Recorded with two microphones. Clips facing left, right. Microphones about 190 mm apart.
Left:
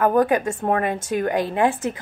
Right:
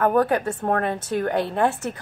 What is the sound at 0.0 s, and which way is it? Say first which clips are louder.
A woman's voice: left 2 dB; 10° left (ahead or behind).